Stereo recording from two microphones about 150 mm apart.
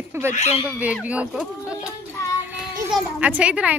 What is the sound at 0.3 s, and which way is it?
Speech, 50° left (ahead or behind).